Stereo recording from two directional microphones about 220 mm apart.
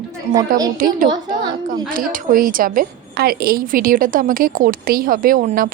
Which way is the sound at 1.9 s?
40° right (ahead or behind).